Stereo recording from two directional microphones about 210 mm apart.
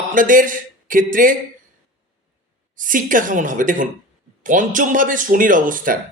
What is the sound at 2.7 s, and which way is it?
Speech, 40° right (ahead or behind).